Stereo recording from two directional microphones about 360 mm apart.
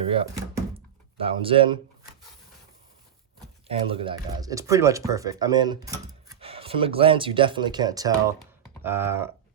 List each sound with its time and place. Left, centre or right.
0.0 s speech: centre
3.7 s speech: centre